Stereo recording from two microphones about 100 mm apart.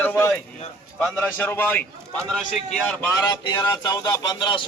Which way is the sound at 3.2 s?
45° left (ahead or behind).